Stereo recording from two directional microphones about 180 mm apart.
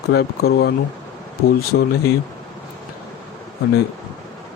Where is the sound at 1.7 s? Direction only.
70° left (ahead or behind).